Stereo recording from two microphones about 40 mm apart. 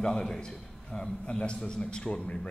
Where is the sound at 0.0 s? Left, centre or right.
Centre.